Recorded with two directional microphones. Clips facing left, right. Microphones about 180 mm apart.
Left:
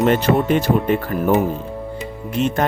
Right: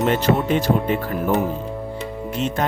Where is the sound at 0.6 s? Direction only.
50° left (ahead or behind).